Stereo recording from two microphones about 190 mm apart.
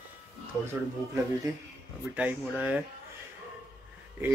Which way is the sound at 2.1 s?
5° right (ahead or behind).